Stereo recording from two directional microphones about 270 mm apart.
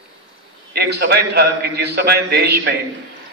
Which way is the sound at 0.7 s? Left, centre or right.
Right.